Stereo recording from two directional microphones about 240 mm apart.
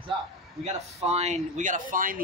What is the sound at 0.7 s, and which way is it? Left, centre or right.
A man's voice, right.